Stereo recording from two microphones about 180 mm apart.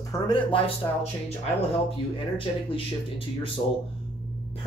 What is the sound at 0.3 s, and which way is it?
Speech, 30° left (ahead or behind).